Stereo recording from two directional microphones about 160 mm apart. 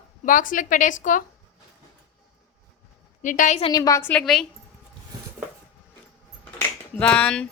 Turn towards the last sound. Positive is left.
turn(degrees=5)  # may be behind; listen again after turning